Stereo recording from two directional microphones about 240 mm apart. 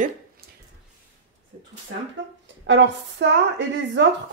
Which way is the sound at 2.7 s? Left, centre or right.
Right.